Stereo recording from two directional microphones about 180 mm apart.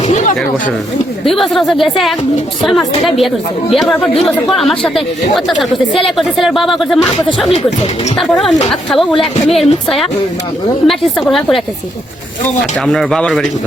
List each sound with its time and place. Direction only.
0.1 s a sound: 40° left (ahead or behind)
1.2 s speech: centre (ahead or behind)
10.8 s speech: centre (ahead or behind)
12.8 s speech: centre (ahead or behind)